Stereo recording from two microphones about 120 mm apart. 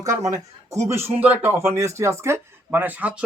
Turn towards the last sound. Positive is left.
turn(degrees=-10)  # may be behind; listen again after turning